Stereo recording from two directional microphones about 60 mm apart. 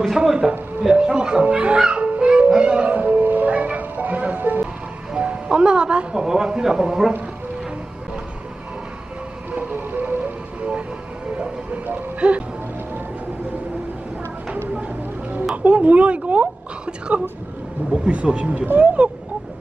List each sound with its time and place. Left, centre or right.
0.1 s speech: centre
0.4 s speech: right
0.8 s music: centre
5.1 s music: centre
9.5 s music: right
11.3 s a sound: right
15.5 s a woman's voice: right